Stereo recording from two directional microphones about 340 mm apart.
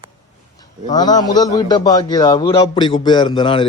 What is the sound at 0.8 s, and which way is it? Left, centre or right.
A man's voice, centre.